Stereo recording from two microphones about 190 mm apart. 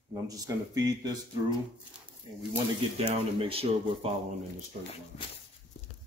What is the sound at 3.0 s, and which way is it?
A man's voice, 30° right (ahead or behind).